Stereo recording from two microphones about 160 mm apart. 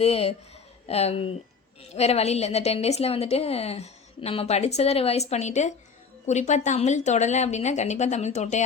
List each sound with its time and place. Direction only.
0.0 s a woman's voice: 40° left (ahead or behind)